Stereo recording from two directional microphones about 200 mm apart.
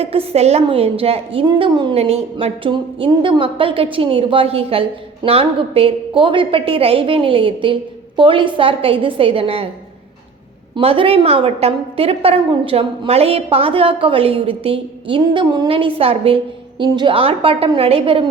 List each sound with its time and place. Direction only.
0.0 s a woman's voice: 30° right (ahead or behind)
10.8 s a woman's voice: 30° right (ahead or behind)